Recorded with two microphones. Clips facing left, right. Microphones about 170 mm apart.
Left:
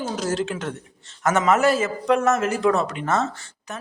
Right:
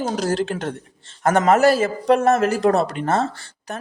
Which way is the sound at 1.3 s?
55° right (ahead or behind).